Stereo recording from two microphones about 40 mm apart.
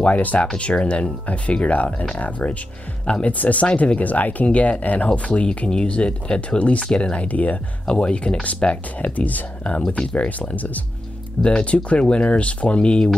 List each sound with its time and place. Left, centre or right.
0.0 s speech: left
7.8 s speech: left
8.9 s speech: left
11.4 s speech: left